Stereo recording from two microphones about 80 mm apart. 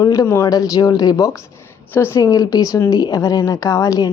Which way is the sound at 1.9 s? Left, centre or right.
Left.